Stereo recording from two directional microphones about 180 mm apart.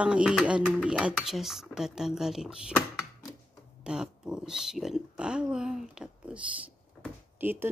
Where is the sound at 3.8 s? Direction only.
5° right (ahead or behind).